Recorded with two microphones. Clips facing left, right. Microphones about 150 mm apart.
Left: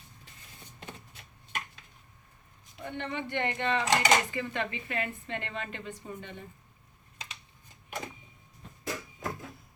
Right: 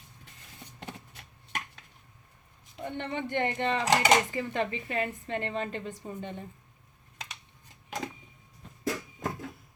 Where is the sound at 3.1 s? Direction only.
45° right (ahead or behind).